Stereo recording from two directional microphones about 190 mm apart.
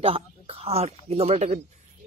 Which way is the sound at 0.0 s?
30° right (ahead or behind).